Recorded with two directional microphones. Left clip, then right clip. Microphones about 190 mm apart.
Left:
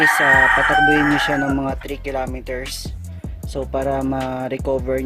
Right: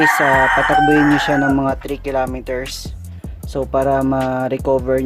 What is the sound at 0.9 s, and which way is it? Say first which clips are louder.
Speech: right 2 dB; 5° right (ahead or behind).